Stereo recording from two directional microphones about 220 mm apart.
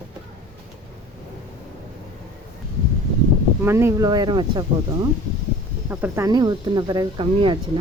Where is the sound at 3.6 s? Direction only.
10° right (ahead or behind).